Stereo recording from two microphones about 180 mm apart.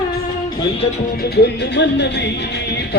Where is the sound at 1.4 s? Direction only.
70° left (ahead or behind).